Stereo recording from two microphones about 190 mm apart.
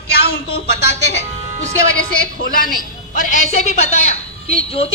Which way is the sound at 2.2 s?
50° left (ahead or behind).